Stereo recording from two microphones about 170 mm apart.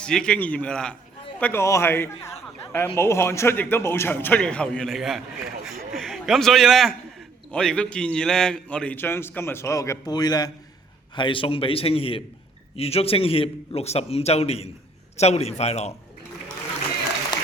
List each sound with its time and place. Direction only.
0.0 s a man's voice: 5° left (ahead or behind); by 16.0 s 40° left (ahead or behind)